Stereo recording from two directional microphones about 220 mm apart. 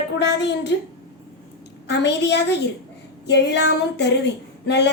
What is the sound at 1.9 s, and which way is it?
A woman's voice, 50° left (ahead or behind).